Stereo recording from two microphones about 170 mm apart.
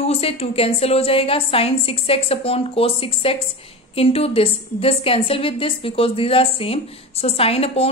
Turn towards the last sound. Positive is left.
turn(degrees=35)  # may be behind; listen again after turning